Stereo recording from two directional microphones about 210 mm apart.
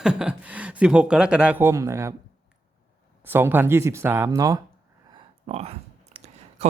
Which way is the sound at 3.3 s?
10° right (ahead or behind).